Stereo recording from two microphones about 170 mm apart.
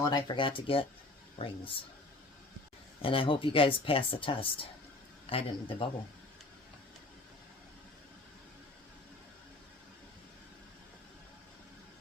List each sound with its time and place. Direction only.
0.0 s speech: 25° left (ahead or behind)
3.0 s a man's voice: 30° left (ahead or behind)